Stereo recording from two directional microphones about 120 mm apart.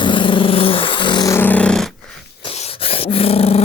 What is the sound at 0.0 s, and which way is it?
Vehicle, 45° left (ahead or behind).